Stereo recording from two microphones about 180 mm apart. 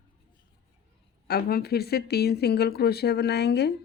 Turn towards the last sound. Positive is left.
turn(degrees=65)  # may be behind; listen again after turning